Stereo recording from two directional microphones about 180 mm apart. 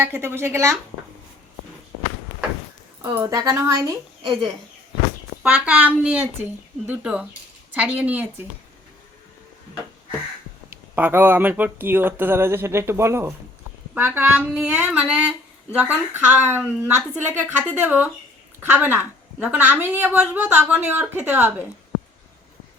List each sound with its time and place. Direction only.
0.0 s a woman's voice: 10° right (ahead or behind)
3.0 s speech: 15° right (ahead or behind)
5.4 s a woman's voice: 5° right (ahead or behind)
10.7 s a woman's voice: 10° right (ahead or behind)